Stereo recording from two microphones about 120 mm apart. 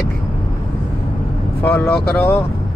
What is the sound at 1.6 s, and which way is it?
Speech, 20° left (ahead or behind).